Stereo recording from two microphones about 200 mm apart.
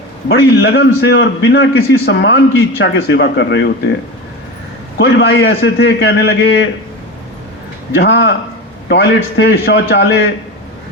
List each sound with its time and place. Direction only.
0.3 s a man's voice: 55° left (ahead or behind)
4.9 s a man's voice: 60° left (ahead or behind)
7.9 s a man's voice: 60° left (ahead or behind)